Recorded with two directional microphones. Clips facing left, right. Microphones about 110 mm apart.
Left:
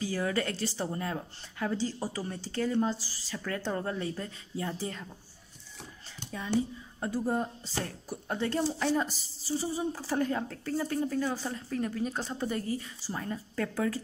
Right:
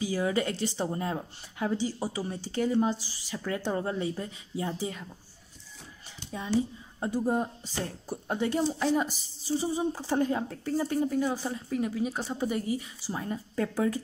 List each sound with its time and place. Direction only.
0.0 s a woman's voice: 15° right (ahead or behind)
7.0 s a woman's voice: 15° right (ahead or behind)